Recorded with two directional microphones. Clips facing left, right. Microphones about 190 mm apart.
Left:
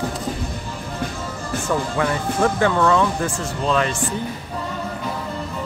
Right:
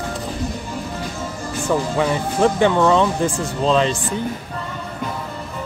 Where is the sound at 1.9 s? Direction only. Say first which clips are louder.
Right 2 dB; 20° right (ahead or behind).